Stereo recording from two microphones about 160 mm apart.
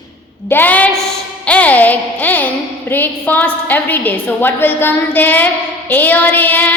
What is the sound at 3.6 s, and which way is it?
A woman's voice, 10° left (ahead or behind).